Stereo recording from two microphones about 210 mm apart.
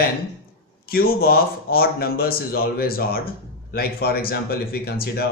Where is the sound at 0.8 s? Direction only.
45° left (ahead or behind).